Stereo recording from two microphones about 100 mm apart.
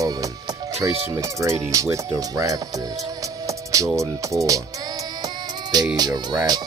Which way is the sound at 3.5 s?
30° right (ahead or behind).